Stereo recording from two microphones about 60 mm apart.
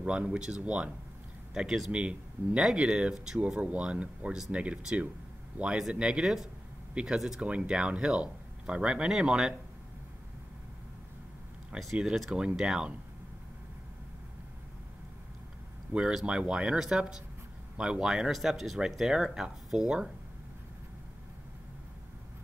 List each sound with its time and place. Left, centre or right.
0.0 s speech: centre
1.5 s speech: centre
1.9 s speech: centre
6.9 s speech: centre
7.2 s speech: centre
7.4 s speech: centre
11.8 s speech: centre
15.9 s speech: centre